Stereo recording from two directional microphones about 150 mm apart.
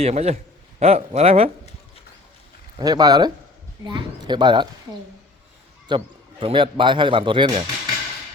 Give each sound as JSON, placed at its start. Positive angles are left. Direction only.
{"t": 0.0, "sound": "speech", "side_deg": -45}
{"t": 2.7, "sound": "speech", "side_deg": -25}
{"t": 5.9, "sound": "speech", "side_deg": -30}